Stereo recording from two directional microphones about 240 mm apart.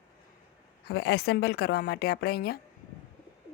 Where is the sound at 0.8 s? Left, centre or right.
Left.